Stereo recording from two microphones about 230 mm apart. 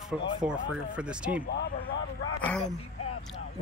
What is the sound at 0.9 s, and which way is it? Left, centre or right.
Speech, centre.